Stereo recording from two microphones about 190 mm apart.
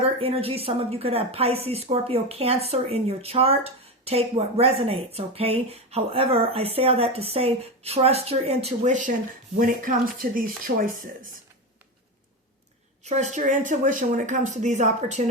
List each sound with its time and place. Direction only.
0.0 s a woman's voice: 30° right (ahead or behind); by 10.9 s 50° right (ahead or behind)
13.1 s a woman's voice: 35° right (ahead or behind)